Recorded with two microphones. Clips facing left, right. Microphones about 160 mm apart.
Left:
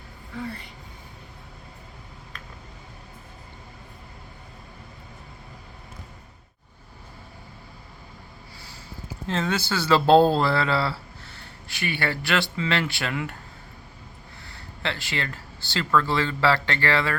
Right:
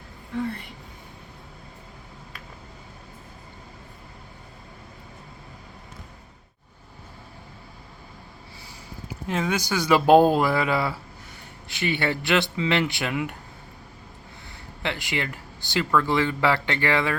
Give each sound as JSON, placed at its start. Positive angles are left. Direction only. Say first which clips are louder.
{"t": 9.2, "sound": "speech", "louder": "even", "side_deg": -10}
{"t": 14.4, "sound": "speech", "louder": "right 1 dB", "side_deg": -15}